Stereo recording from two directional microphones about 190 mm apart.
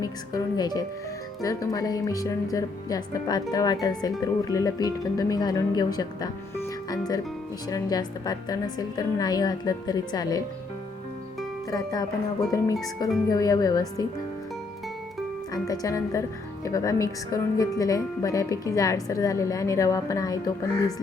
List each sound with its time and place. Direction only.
0.0 s speech: 20° left (ahead or behind)
7.7 s speech: 20° left (ahead or behind)
11.7 s speech: 20° left (ahead or behind)
15.5 s speech: 20° left (ahead or behind)